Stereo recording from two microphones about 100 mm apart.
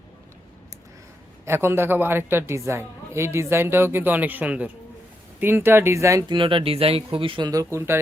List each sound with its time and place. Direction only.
1.5 s a woman's voice: 25° right (ahead or behind)
6.2 s speech: 55° right (ahead or behind)
7.5 s a woman's voice: 30° right (ahead or behind)